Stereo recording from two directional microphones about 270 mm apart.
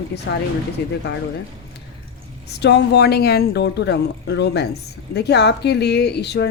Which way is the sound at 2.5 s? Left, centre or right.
Left.